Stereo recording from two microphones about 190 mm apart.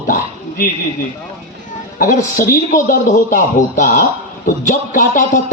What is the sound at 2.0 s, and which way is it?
A man's voice, 45° left (ahead or behind).